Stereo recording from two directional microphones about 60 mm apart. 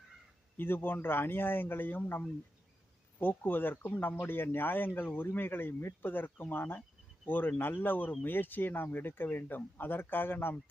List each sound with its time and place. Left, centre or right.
0.5 s speech: left
3.2 s speech: left